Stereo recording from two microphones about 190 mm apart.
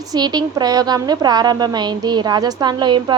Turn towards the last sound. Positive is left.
turn(degrees=-25)  # may be behind; listen again after turning